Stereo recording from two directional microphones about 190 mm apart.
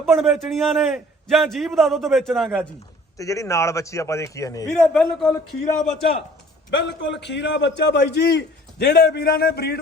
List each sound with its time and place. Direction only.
0.0 s a man's voice: centre (ahead or behind)
3.2 s a man's voice: 15° left (ahead or behind)
4.7 s a man's voice: 5° left (ahead or behind)
6.7 s a man's voice: 65° left (ahead or behind)